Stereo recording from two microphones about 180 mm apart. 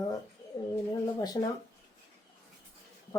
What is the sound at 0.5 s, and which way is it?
Speech, 20° left (ahead or behind).